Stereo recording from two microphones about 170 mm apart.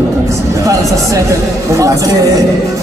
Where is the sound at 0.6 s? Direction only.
20° right (ahead or behind).